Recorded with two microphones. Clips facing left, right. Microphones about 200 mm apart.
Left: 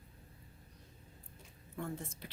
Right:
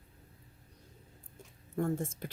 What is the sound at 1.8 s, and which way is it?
Speech, 45° right (ahead or behind).